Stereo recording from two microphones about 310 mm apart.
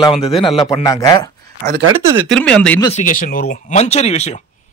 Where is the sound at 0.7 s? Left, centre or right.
Centre.